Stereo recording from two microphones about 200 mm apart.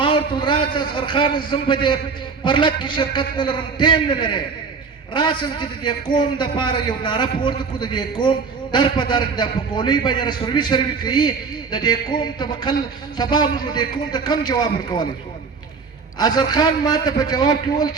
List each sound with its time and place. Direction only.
0.0 s a man's voice: 25° left (ahead or behind)
16.1 s a man's voice: 20° left (ahead or behind)